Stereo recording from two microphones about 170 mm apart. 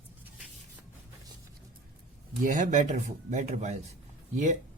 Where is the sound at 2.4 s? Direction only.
50° right (ahead or behind).